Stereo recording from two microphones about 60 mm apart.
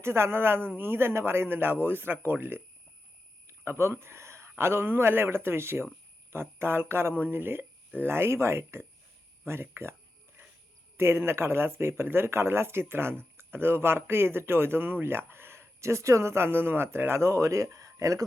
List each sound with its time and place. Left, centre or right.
0.0 s a man's voice: right
3.6 s a man's voice: right
10.9 s speech: right